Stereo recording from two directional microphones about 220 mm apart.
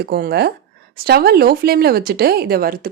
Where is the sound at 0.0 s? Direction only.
45° right (ahead or behind).